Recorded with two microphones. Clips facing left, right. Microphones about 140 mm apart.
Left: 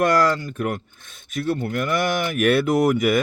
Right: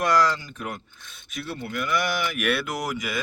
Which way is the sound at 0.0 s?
55° left (ahead or behind).